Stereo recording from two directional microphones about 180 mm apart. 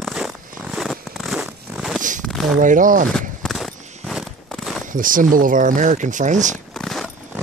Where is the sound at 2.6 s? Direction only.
45° right (ahead or behind).